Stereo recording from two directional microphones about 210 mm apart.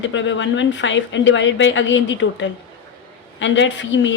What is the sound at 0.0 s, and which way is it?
Speech, 60° left (ahead or behind).